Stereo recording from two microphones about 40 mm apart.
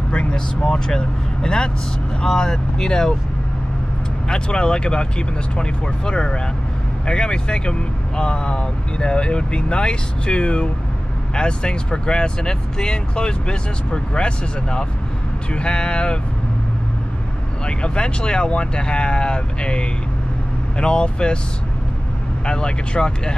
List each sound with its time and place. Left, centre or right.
0.1 s vehicle: left
0.7 s speech: centre
4.3 s speech: left
17.6 s speech: left
22.5 s speech: left